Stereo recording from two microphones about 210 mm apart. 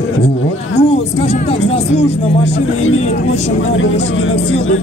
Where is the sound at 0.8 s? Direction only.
30° left (ahead or behind).